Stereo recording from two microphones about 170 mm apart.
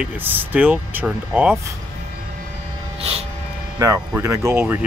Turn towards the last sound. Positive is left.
turn(degrees=-15)  # may be behind; listen again after turning